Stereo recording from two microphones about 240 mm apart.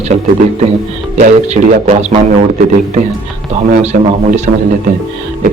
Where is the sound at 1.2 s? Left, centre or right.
Right.